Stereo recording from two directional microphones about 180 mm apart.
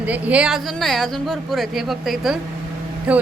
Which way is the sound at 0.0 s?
10° right (ahead or behind).